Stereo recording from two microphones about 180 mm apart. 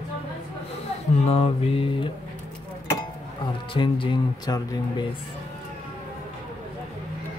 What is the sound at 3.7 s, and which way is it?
Speech, 30° left (ahead or behind).